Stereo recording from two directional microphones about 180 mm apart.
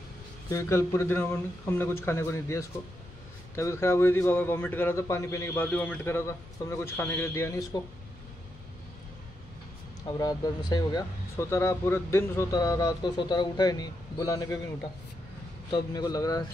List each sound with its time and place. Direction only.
0.5 s a man's voice: 15° left (ahead or behind)
10.0 s speech: 20° left (ahead or behind)
15.7 s speech: 20° left (ahead or behind)